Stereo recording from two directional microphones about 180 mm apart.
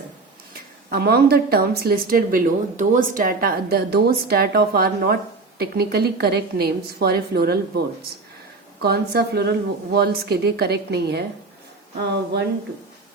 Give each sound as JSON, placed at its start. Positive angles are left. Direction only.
{"t": 0.9, "sound": "speech", "side_deg": -60}
{"t": 8.8, "sound": "speech", "side_deg": -60}